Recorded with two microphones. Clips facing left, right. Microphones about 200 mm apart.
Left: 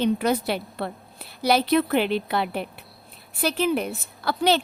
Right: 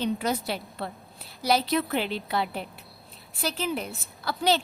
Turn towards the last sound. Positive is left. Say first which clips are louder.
# left 4 dB
turn(degrees=65)  # may be behind; listen again after turning